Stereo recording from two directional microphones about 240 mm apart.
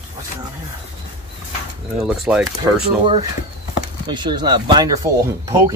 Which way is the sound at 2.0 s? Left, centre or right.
Centre.